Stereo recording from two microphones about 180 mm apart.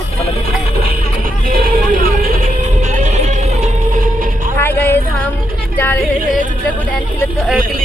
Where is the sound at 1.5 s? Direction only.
50° right (ahead or behind).